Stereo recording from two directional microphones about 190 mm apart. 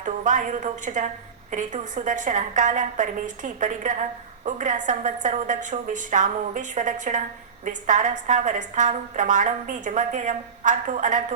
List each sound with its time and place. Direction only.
0.0 s a woman's voice: 40° right (ahead or behind)